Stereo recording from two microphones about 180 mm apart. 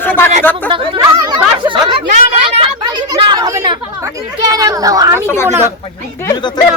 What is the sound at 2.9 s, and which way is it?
Chatter, 25° right (ahead or behind).